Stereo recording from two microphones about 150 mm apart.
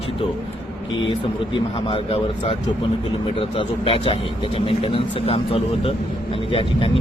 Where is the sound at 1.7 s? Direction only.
40° left (ahead or behind).